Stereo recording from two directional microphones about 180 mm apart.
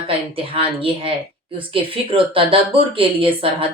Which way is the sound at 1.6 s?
30° right (ahead or behind).